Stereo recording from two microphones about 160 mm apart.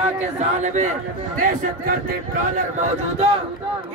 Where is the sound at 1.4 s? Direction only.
60° right (ahead or behind).